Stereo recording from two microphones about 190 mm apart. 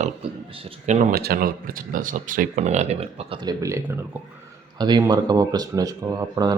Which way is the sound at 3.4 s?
15° right (ahead or behind).